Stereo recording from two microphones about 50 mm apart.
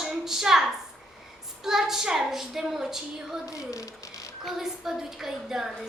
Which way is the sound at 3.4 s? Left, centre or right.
Left.